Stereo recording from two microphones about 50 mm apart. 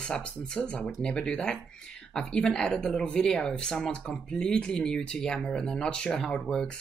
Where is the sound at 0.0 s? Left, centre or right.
Centre.